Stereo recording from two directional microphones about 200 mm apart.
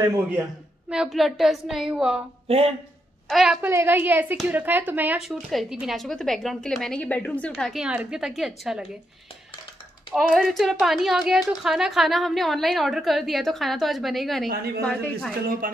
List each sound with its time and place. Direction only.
0.8 s speech: 5° right (ahead or behind)
2.4 s speech: 30° right (ahead or behind)
3.3 s speech: centre (ahead or behind)
3.6 s a woman's voice: 10° right (ahead or behind)
10.1 s speech: centre (ahead or behind)
15.6 s music: 45° right (ahead or behind)